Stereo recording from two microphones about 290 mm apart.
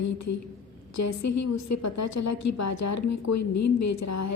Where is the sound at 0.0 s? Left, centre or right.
Left.